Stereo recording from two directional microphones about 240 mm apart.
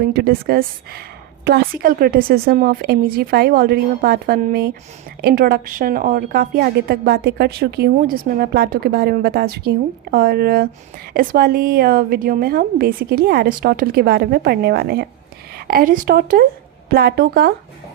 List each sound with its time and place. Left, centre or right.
0.1 s a woman's voice: right